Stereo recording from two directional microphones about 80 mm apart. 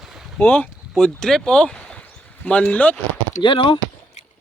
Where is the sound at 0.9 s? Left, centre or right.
Centre.